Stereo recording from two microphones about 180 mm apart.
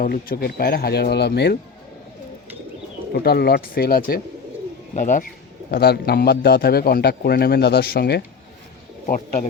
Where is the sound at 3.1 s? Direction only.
60° left (ahead or behind).